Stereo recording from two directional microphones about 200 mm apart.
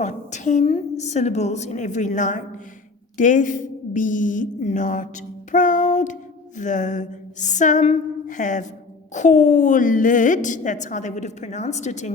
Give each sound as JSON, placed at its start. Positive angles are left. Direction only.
{"t": 0.0, "sound": "a woman's voice", "side_deg": 35}
{"t": 5.5, "sound": "a sound", "side_deg": 40}
{"t": 6.6, "sound": "a woman's voice", "side_deg": 40}